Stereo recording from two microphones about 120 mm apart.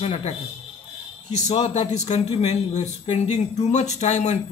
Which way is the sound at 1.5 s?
60° left (ahead or behind).